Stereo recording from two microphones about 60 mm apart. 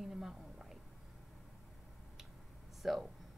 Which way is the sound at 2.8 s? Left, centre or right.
Centre.